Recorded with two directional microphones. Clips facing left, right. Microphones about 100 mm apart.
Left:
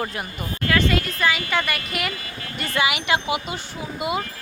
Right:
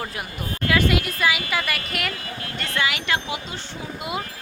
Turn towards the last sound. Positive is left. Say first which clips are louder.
# left 5 dB
turn(degrees=5)  # may be behind; listen again after turning